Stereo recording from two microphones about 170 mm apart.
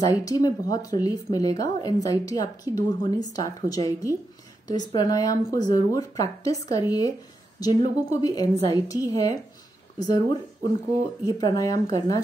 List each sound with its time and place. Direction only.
0.2 s a woman's voice: 20° left (ahead or behind)
8.1 s a woman's voice: 20° left (ahead or behind)